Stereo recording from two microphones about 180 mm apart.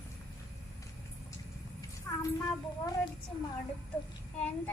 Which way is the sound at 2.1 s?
10° left (ahead or behind).